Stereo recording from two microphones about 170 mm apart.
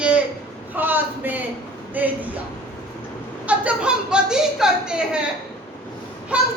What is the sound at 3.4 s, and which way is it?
A woman's voice, 10° right (ahead or behind).